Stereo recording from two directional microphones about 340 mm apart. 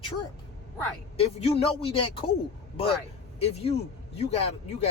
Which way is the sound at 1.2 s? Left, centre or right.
Centre.